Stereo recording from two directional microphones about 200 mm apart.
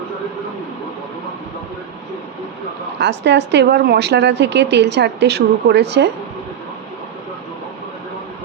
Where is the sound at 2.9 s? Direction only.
60° right (ahead or behind).